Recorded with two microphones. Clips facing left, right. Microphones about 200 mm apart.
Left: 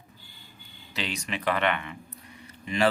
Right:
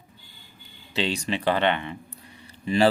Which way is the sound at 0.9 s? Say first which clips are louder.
Right 7 dB; 30° right (ahead or behind).